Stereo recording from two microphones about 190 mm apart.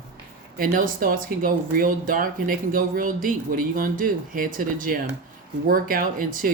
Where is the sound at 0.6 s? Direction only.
50° right (ahead or behind).